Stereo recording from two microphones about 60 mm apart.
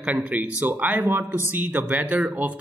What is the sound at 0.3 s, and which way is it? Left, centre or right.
Speech, right.